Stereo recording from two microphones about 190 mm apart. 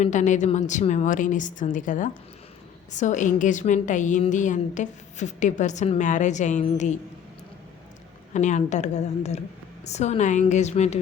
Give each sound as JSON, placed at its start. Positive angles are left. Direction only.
{"t": 0.0, "sound": "a woman's voice", "side_deg": 40}
{"t": 8.3, "sound": "a woman's voice", "side_deg": 40}